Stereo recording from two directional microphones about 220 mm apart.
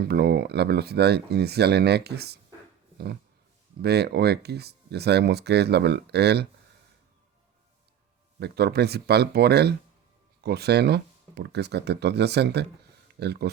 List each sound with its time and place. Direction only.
0.0 s speech: 45° right (ahead or behind)
3.8 s speech: 45° right (ahead or behind)
8.4 s speech: 50° right (ahead or behind)